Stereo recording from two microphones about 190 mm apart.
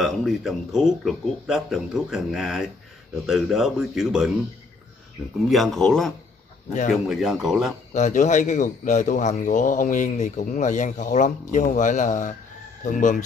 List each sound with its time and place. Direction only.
0.0 s speech: centre (ahead or behind)
5.5 s speech: centre (ahead or behind)
7.9 s a man's voice: 40° left (ahead or behind)